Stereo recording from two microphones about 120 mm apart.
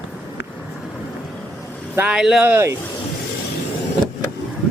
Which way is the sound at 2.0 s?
10° right (ahead or behind).